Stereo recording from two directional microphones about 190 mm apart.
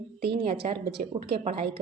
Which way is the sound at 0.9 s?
55° right (ahead or behind).